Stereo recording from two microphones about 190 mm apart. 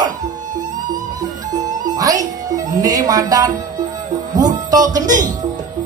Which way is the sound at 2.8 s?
20° right (ahead or behind).